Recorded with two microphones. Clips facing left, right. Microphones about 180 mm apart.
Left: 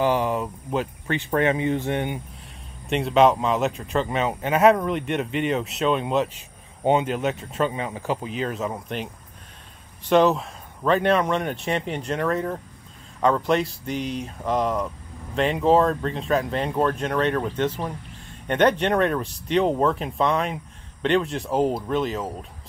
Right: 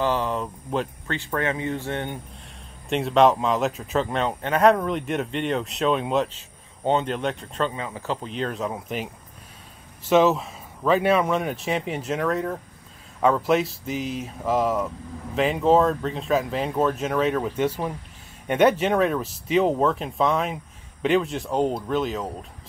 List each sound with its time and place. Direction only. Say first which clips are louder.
0.0 s a sound: left 2 dB; 15° left (ahead or behind)
1.0 s speech: left 4 dB; 20° left (ahead or behind)
2.9 s speech: even; centre (ahead or behind)
6.3 s speech: left 2 dB; 10° left (ahead or behind)
7.7 s speech: left 2 dB; 15° left (ahead or behind); by 22.5 s centre (ahead or behind)